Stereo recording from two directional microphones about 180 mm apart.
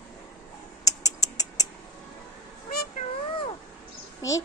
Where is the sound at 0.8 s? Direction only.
20° left (ahead or behind).